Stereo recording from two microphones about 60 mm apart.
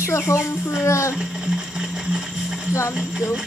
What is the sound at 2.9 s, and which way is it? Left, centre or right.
Speech, centre.